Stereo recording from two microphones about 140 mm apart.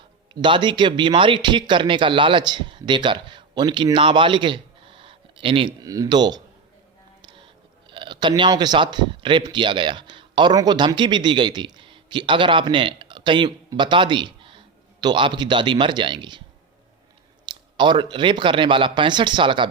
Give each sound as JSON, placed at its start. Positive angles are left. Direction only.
{"t": 0.4, "sound": "speech", "side_deg": -35}
{"t": 5.8, "sound": "speech", "side_deg": -25}
{"t": 7.2, "sound": "music", "side_deg": -35}
{"t": 7.9, "sound": "a sound", "side_deg": -35}
{"t": 8.4, "sound": "a man's voice", "side_deg": -30}
{"t": 17.4, "sound": "speech", "side_deg": -35}